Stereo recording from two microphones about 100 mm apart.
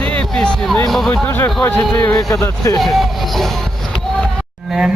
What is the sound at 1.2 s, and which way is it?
Speech, 20° left (ahead or behind).